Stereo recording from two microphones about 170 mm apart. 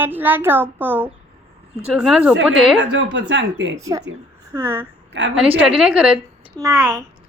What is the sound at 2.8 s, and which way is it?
Speech, 90° right.